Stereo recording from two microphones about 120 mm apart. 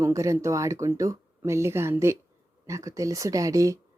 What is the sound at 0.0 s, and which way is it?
Speech, 25° right (ahead or behind).